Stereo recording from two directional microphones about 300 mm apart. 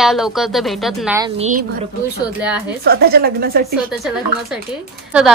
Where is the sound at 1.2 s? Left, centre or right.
Right.